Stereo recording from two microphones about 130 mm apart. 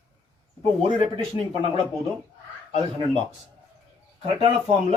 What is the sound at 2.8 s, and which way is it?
Speech, 40° right (ahead or behind).